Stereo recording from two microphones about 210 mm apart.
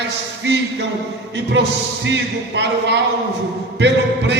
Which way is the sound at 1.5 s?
60° right (ahead or behind).